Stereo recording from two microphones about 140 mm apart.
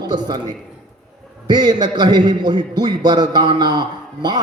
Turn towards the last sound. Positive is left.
turn(degrees=-30)  # may be behind; listen again after turning